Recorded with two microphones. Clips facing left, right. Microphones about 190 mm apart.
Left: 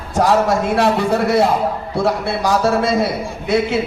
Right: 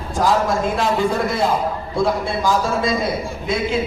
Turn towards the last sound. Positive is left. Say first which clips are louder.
# left 4 dB
turn(degrees=70)  # may be behind; listen again after turning